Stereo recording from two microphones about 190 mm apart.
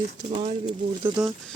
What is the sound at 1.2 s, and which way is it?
Speech, 5° right (ahead or behind).